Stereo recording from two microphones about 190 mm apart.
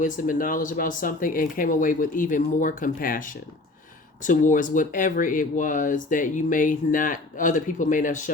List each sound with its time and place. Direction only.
0.0 s speech: 45° left (ahead or behind)